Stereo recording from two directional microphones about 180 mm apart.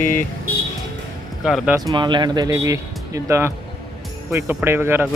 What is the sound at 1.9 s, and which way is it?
Speech, 25° right (ahead or behind).